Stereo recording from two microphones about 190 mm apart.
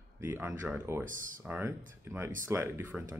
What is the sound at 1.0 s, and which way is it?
Speech, 45° right (ahead or behind).